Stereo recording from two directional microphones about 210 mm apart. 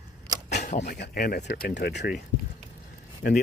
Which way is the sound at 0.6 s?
35° left (ahead or behind).